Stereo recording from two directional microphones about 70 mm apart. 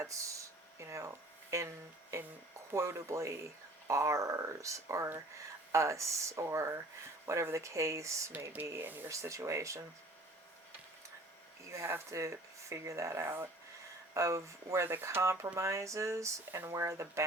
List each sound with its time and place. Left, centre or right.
0.0 s speech: right
8.8 s speech: right
9.0 s speech: right
11.7 s speech: right
14.1 s speech: right